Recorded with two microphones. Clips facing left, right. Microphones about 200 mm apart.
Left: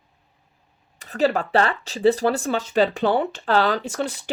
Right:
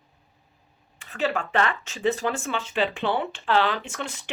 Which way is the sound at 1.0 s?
40° left (ahead or behind).